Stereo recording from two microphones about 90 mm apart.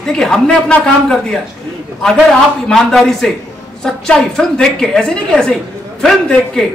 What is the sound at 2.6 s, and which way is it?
A man's voice, 5° left (ahead or behind).